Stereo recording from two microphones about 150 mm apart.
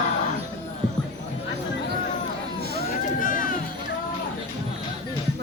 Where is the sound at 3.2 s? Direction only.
65° left (ahead or behind).